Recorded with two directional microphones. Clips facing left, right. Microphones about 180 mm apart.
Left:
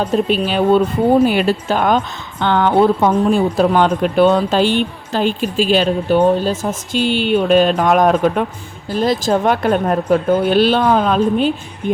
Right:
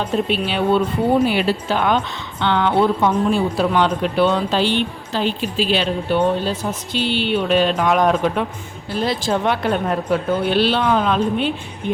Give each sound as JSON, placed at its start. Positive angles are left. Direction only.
{"t": 0.0, "sound": "speech", "side_deg": 40}